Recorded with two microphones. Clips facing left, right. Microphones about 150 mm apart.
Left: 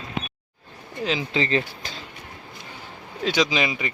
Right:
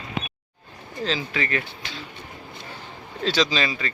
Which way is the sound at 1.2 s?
25° left (ahead or behind).